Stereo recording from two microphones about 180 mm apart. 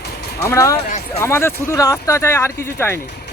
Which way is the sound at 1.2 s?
15° left (ahead or behind).